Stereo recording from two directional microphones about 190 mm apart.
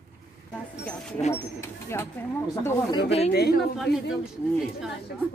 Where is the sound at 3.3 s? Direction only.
55° left (ahead or behind).